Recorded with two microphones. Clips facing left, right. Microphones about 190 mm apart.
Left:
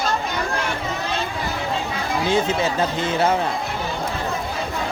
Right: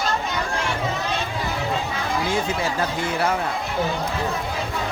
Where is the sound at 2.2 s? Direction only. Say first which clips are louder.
Left 6 dB; 25° left (ahead or behind).